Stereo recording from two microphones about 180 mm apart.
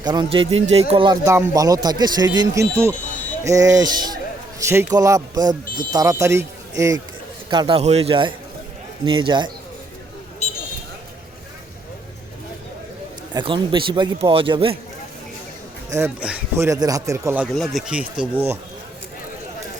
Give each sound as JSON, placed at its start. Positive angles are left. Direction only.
{"t": 0.0, "sound": "speech", "side_deg": -25}
{"t": 13.3, "sound": "speech", "side_deg": -30}
{"t": 15.9, "sound": "speech", "side_deg": -15}
{"t": 17.5, "sound": "speech", "side_deg": 0}